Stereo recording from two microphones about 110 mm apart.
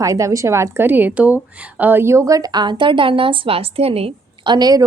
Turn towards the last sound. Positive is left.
turn(degrees=-40)  # may be behind; listen again after turning